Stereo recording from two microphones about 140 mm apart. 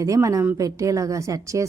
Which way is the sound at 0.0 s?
25° right (ahead or behind).